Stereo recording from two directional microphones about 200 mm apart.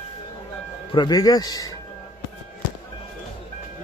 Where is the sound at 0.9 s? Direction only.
20° left (ahead or behind).